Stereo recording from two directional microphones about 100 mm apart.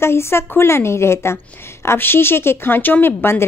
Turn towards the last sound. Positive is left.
turn(degrees=20)  # may be behind; listen again after turning